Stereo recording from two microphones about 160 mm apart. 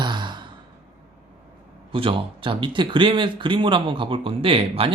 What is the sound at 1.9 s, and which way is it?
Speech, 35° right (ahead or behind).